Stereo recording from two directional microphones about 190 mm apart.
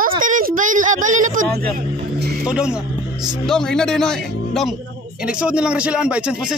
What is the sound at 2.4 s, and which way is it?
A man's voice, 5° right (ahead or behind).